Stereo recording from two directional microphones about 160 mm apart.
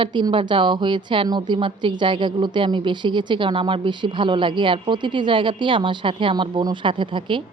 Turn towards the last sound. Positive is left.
turn(degrees=-30)  # may be behind; listen again after turning